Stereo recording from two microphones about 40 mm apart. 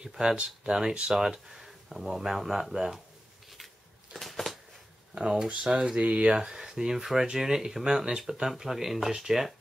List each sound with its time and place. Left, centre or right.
0.7 s speech: centre
3.4 s a sound: centre
5.1 s speech: right